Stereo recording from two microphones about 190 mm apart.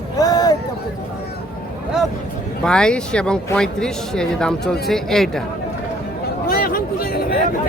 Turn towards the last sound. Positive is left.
turn(degrees=50)  # may be behind; listen again after turning